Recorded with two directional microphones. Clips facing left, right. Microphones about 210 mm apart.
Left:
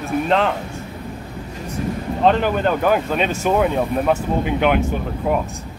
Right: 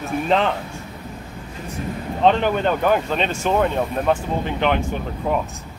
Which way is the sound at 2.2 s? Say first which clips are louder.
Even; 5° left (ahead or behind).